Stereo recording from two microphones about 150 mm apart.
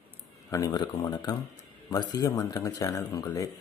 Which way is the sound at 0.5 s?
25° left (ahead or behind).